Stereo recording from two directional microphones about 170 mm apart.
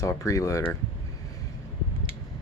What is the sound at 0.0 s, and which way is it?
Speech, 20° left (ahead or behind).